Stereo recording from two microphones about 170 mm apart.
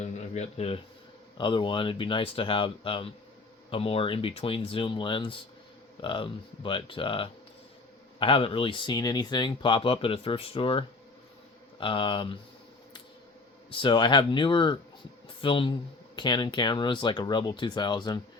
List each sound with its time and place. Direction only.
0.0 s a sound: 40° left (ahead or behind)
1.4 s speech: 30° left (ahead or behind)
13.7 s speech: 30° left (ahead or behind)